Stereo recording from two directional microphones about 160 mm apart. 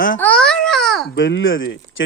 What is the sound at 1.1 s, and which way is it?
Speech, 90° left.